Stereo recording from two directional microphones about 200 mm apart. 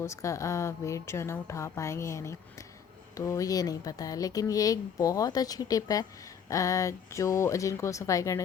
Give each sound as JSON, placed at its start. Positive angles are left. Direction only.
{"t": 0.0, "sound": "speech", "side_deg": 15}